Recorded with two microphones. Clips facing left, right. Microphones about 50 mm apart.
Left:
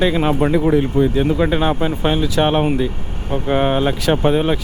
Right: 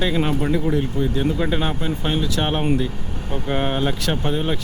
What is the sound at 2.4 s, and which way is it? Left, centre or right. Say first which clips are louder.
Speech: left 5 dB; centre.